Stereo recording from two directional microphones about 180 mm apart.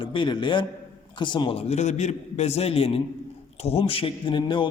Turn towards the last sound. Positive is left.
turn(degrees=25)  # may be behind; listen again after turning